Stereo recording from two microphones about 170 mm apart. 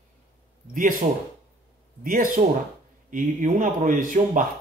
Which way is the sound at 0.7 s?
50° right (ahead or behind).